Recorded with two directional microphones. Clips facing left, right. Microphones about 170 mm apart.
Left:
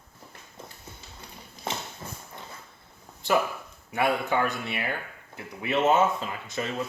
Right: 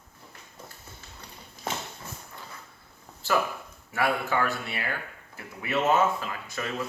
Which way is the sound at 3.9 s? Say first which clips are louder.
Left 2 dB; 20° left (ahead or behind).